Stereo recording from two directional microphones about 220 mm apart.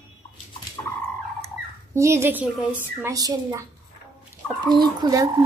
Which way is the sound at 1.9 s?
10° right (ahead or behind).